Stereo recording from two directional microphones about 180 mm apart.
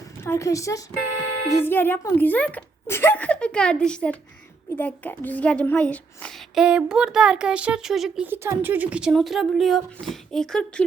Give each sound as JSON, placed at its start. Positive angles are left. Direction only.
{"t": 0.3, "sound": "a child's voice", "side_deg": 15}